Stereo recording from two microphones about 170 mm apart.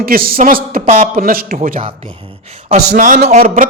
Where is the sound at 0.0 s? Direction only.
60° right (ahead or behind).